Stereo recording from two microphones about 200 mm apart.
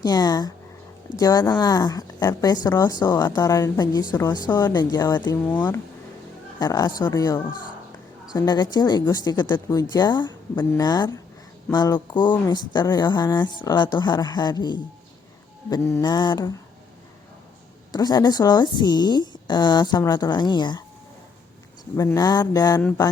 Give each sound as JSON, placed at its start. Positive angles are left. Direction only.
{"t": 0.0, "sound": "a woman's voice", "side_deg": 20}
{"t": 6.6, "sound": "a woman's voice", "side_deg": 20}
{"t": 17.9, "sound": "a woman's voice", "side_deg": 20}
{"t": 21.9, "sound": "a woman's voice", "side_deg": 15}